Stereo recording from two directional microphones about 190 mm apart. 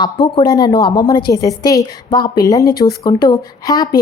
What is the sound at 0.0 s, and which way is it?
A woman's voice, 25° left (ahead or behind).